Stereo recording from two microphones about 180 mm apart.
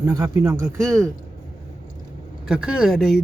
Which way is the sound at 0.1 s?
20° right (ahead or behind).